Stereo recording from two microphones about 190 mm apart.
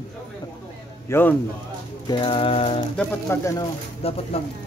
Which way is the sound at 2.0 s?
25° left (ahead or behind).